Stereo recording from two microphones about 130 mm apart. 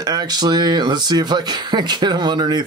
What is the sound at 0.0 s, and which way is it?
Speech, 30° right (ahead or behind).